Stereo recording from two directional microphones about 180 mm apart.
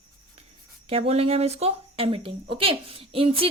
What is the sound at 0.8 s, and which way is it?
Speech, 35° right (ahead or behind).